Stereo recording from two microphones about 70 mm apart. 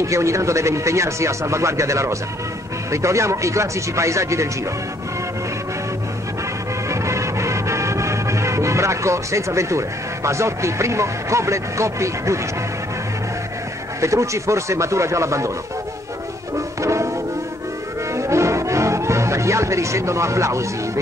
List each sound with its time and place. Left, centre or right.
0.0 s speech: right
6.9 s music: right
14.0 s speech: right
16.5 s music: right
18.1 s music: right